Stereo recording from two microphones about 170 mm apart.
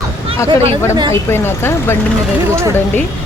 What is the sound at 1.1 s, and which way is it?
Speech, 15° left (ahead or behind).